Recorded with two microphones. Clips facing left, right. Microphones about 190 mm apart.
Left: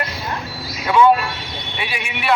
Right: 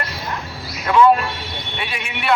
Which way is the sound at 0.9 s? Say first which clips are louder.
Even; centre (ahead or behind).